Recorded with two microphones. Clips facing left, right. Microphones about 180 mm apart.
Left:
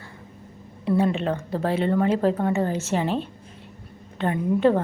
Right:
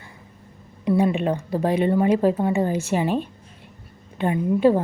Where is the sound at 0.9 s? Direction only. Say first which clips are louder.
Right 2 dB; 15° right (ahead or behind).